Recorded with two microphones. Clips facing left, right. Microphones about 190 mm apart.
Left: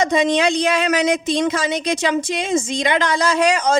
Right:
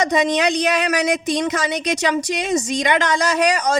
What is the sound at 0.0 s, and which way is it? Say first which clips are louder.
Speech: left 1 dB; 40° right (ahead or behind).